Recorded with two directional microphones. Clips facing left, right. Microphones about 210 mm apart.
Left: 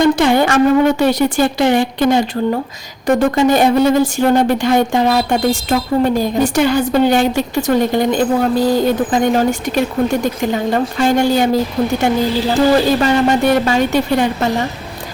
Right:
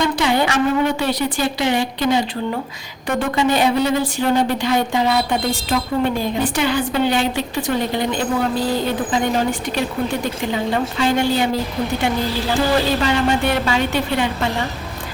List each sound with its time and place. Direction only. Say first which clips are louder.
0.0 s a woman's voice: left 6 dB; 45° left (ahead or behind)